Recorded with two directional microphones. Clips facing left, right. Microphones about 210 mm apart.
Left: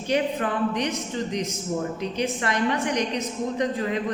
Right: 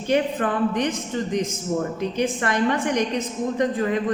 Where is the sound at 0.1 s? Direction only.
50° right (ahead or behind).